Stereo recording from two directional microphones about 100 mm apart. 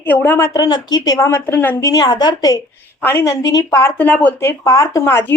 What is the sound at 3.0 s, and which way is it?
Speech, 20° left (ahead or behind).